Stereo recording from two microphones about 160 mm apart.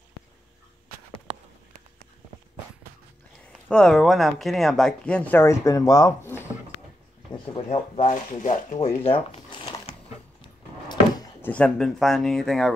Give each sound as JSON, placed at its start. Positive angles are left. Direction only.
{"t": 3.5, "sound": "speech", "side_deg": 5}
{"t": 7.5, "sound": "speech", "side_deg": 40}
{"t": 11.4, "sound": "speech", "side_deg": 5}